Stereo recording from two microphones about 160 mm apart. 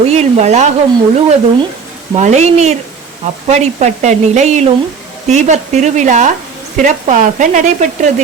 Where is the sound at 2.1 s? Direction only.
45° right (ahead or behind).